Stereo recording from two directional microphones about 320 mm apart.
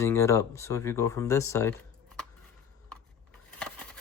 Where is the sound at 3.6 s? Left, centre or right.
Centre.